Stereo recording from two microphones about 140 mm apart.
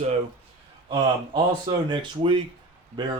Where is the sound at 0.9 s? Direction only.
35° right (ahead or behind).